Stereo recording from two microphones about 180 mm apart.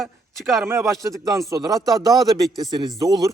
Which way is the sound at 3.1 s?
20° right (ahead or behind).